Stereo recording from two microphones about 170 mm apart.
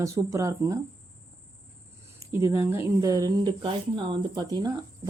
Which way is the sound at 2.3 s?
15° right (ahead or behind).